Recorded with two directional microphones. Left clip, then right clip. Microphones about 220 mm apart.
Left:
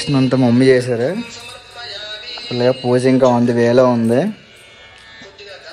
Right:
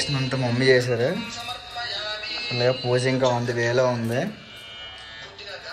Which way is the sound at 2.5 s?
5° left (ahead or behind).